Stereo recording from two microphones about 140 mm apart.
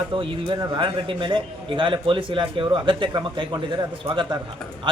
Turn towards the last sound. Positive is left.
turn(degrees=-30)  # may be behind; listen again after turning